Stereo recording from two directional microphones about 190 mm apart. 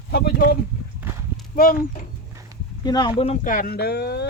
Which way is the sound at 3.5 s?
50° left (ahead or behind).